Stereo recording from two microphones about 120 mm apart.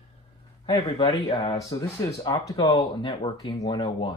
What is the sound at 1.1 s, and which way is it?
Speech, 35° left (ahead or behind).